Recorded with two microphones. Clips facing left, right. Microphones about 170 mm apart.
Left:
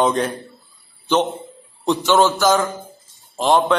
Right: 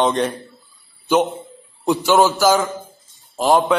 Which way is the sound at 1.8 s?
Centre (ahead or behind).